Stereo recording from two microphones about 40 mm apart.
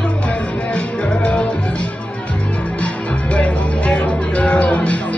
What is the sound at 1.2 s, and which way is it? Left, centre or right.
Music, left.